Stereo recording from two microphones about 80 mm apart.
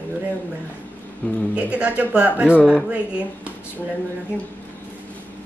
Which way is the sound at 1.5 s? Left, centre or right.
Centre.